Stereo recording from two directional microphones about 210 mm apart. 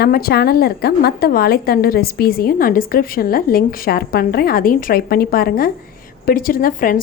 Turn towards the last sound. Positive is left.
turn(degrees=40)  # may be behind; listen again after turning